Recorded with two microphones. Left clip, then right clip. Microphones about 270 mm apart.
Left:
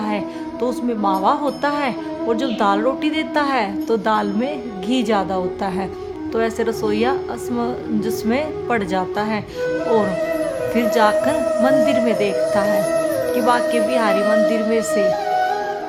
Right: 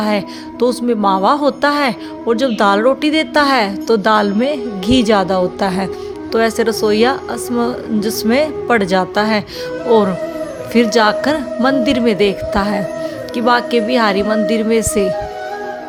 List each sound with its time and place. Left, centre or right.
0.6 s a woman's voice: centre
10.8 s a woman's voice: centre